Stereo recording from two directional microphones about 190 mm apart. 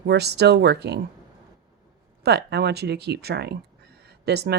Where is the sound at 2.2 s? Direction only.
60° right (ahead or behind).